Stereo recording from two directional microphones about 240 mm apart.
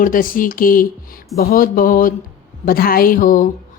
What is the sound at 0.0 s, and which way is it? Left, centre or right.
Speech, left.